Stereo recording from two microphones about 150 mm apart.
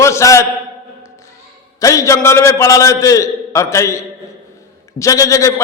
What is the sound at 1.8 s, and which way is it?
A man's voice, 20° left (ahead or behind).